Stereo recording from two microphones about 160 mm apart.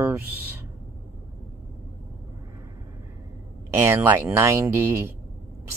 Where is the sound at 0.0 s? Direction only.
15° right (ahead or behind).